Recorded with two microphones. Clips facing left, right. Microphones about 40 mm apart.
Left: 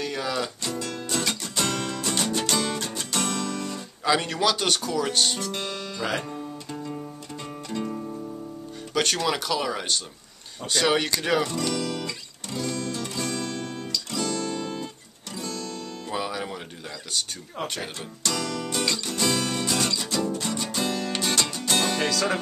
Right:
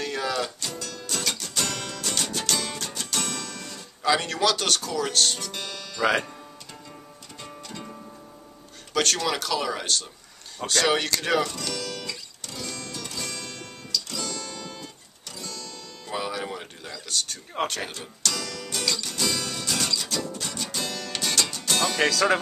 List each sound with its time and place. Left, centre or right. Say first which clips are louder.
0.0 s music: right 1 dB; centre
0.3 s music: left 1 dB; centre
4.0 s speech: even; centre
7.7 s music: left 11 dB; centre
8.9 s speech: even; centre
11.4 s music: left 4 dB; left
14.2 s guitar: left 6 dB; left
16.1 s music: even; centre
17.6 s speech: right 4 dB; right
18.2 s music: left 3 dB; centre